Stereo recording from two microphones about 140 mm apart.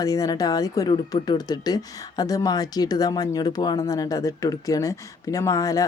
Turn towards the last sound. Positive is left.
turn(degrees=25)  # may be behind; listen again after turning